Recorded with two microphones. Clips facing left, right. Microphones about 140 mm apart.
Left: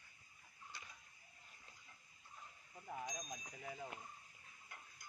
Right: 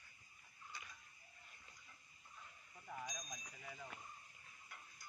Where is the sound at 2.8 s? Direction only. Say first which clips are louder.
Left 3 dB; 25° left (ahead or behind).